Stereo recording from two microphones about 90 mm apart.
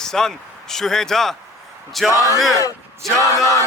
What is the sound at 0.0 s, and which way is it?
Speech, 5° left (ahead or behind).